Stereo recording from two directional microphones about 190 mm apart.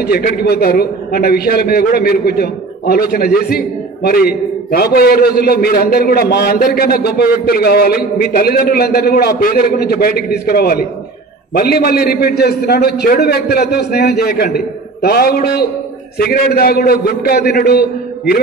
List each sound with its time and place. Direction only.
0.0 s a man's voice: 50° left (ahead or behind)